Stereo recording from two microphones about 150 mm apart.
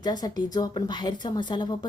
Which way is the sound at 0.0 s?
25° left (ahead or behind).